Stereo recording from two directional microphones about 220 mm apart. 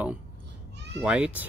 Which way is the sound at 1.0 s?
5° right (ahead or behind).